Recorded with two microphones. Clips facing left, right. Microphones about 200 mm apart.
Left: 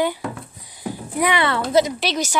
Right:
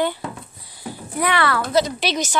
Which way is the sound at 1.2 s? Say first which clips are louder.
Left 1 dB; 15° left (ahead or behind).